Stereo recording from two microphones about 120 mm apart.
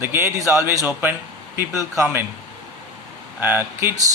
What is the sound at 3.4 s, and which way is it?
Speech, 15° right (ahead or behind).